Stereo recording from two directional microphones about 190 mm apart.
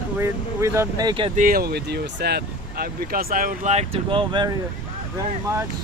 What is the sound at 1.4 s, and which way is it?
Speech, 50° right (ahead or behind).